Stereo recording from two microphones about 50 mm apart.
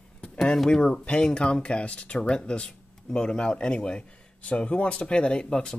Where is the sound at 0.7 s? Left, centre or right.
Centre.